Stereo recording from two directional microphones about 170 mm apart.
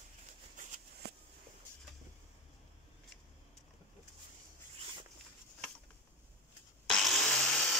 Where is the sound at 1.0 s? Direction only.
70° right (ahead or behind).